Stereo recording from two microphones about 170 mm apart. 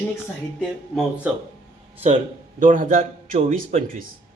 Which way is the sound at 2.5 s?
50° right (ahead or behind).